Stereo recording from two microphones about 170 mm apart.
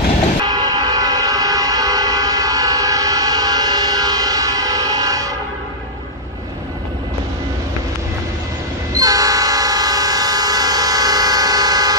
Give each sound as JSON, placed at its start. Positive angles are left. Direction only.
{"t": 0.5, "sound": "train", "side_deg": -25}
{"t": 8.9, "sound": "train", "side_deg": -20}